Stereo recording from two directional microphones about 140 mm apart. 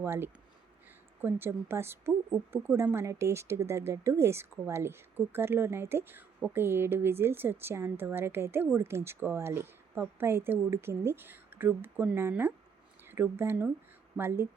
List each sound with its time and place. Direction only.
0.0 s a woman's voice: 15° right (ahead or behind)